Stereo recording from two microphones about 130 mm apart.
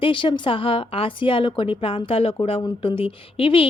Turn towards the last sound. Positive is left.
turn(degrees=45)  # may be behind; listen again after turning